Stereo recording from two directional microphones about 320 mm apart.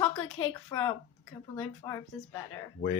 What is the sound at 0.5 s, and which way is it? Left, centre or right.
Speech, centre.